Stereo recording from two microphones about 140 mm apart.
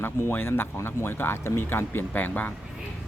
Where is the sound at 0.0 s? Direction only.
15° left (ahead or behind).